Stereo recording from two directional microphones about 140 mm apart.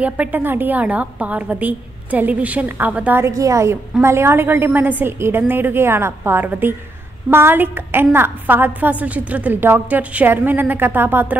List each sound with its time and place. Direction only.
0.0 s a woman's voice: 10° right (ahead or behind)